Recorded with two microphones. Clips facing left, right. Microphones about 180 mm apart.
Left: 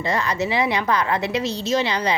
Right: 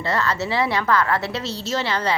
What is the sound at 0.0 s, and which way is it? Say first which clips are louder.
A woman's voice: left 1 dB; 15° left (ahead or behind).